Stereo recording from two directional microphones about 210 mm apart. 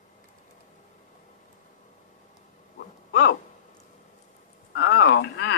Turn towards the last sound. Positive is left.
turn(degrees=55)  # may be behind; listen again after turning